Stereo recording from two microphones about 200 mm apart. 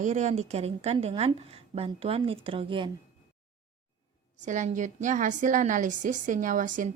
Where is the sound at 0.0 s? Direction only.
35° right (ahead or behind).